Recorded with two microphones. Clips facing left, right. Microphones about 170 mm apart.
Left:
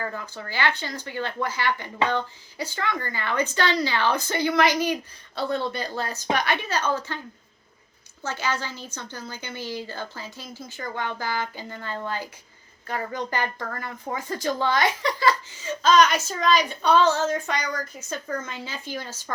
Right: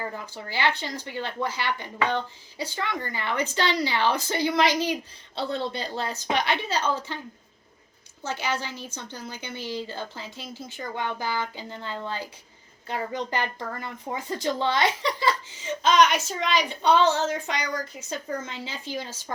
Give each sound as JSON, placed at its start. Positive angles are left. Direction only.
{"t": 0.0, "sound": "speech", "side_deg": -20}
{"t": 8.3, "sound": "speech", "side_deg": -20}